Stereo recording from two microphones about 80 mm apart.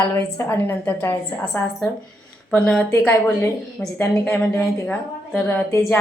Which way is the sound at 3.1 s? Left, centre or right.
Left.